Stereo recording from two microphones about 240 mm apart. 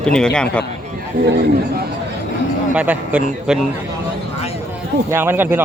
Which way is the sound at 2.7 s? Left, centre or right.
Centre.